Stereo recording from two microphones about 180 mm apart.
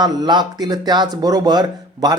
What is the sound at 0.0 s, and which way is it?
Speech, 25° right (ahead or behind).